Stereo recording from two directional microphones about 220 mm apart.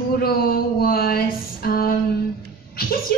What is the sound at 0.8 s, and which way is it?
A woman's voice, 45° left (ahead or behind).